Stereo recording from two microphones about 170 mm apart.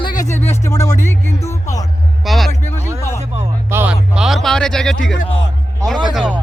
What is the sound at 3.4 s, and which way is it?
Music, 15° right (ahead or behind).